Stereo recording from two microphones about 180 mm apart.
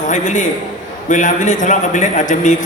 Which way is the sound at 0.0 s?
45° left (ahead or behind).